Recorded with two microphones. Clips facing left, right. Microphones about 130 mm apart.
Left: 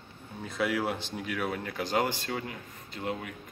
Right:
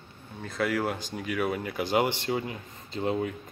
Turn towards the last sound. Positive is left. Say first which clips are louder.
# right 7 dB
turn(degrees=-30)  # may be behind; listen again after turning